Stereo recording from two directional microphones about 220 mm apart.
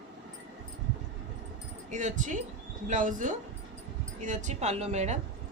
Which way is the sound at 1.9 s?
35° right (ahead or behind).